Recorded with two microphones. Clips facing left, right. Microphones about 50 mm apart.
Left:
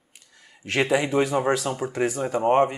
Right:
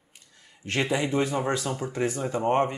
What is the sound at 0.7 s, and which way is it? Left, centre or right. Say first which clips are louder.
Speech: left 4 dB; centre.